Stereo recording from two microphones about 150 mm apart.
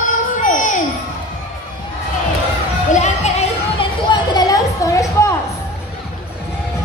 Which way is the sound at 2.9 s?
50° left (ahead or behind).